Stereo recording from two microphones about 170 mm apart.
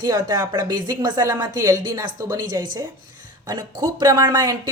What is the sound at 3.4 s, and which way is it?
Speech, 25° right (ahead or behind).